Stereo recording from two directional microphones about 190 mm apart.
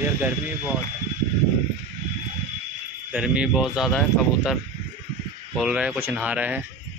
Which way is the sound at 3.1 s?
5° right (ahead or behind).